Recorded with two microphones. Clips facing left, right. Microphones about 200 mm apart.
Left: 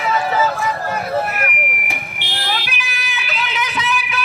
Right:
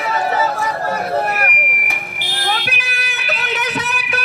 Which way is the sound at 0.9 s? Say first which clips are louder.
Right 1 dB; 40° right (ahead or behind).